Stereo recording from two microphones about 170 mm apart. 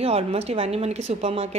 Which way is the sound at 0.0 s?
35° right (ahead or behind).